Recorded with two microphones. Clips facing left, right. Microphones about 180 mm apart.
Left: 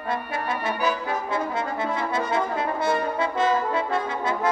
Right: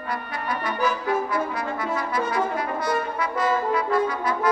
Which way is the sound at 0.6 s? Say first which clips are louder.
Right 2 dB; 25° left (ahead or behind).